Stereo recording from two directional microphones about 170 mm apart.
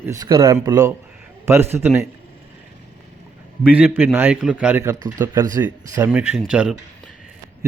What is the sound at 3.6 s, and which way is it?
Speech, 10° right (ahead or behind).